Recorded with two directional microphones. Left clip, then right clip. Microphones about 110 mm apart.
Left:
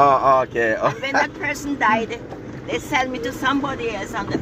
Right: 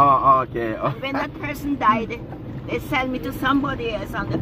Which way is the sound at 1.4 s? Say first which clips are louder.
Left 3 dB; 10° right (ahead or behind).